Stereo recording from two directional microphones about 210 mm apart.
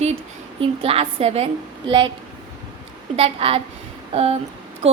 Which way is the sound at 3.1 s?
30° right (ahead or behind).